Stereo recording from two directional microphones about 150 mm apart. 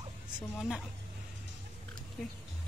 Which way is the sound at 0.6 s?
Centre (ahead or behind).